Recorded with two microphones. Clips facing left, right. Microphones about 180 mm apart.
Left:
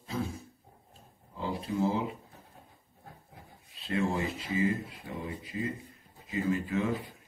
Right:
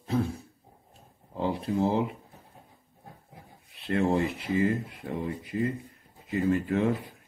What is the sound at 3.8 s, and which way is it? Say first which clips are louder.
Speech: right 5 dB; 60° right (ahead or behind).